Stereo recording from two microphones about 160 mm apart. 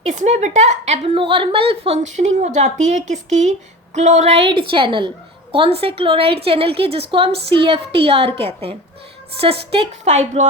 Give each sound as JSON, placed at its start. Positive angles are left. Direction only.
{"t": 0.0, "sound": "a woman's voice", "side_deg": -50}